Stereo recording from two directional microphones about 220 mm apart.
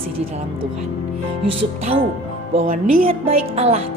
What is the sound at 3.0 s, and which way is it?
Speech, 30° right (ahead or behind).